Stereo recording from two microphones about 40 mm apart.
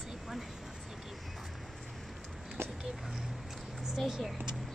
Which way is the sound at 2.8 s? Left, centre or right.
Centre.